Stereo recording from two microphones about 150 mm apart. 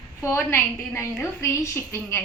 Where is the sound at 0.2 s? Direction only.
15° left (ahead or behind).